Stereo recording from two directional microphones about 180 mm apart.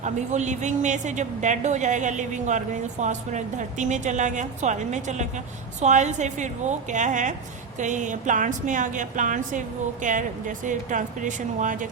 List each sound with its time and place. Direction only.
0.0 s a woman's voice: 40° right (ahead or behind)